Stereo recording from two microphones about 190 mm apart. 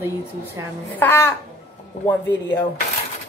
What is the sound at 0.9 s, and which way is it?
Speech, 10° left (ahead or behind).